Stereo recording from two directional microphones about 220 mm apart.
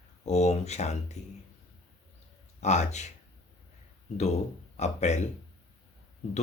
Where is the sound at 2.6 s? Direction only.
30° left (ahead or behind).